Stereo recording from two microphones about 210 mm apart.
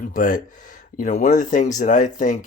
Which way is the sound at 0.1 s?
40° left (ahead or behind).